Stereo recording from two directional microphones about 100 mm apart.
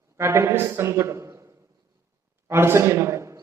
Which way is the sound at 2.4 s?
25° right (ahead or behind).